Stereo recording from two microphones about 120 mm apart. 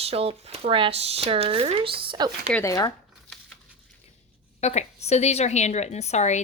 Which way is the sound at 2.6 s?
25° left (ahead or behind).